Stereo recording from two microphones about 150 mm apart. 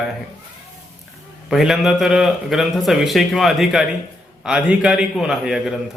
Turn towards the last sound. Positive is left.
turn(degrees=0)  # may be behind; listen again after turning